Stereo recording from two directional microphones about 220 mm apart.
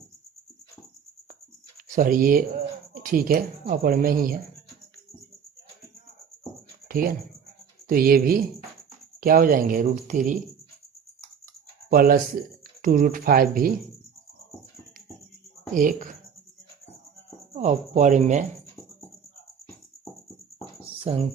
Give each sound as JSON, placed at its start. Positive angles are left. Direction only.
{"t": 1.9, "sound": "speech", "side_deg": -40}
{"t": 6.8, "sound": "speech", "side_deg": -40}
{"t": 11.9, "sound": "speech", "side_deg": -40}
{"t": 15.7, "sound": "speech", "side_deg": -35}
{"t": 17.5, "sound": "speech", "side_deg": -30}
{"t": 21.0, "sound": "speech", "side_deg": -25}